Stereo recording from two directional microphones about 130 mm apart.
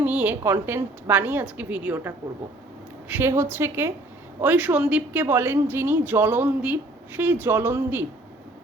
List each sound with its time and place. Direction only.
0.0 s a woman's voice: 10° right (ahead or behind)